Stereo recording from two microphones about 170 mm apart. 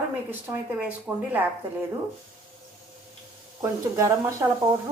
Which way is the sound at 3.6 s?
15° right (ahead or behind).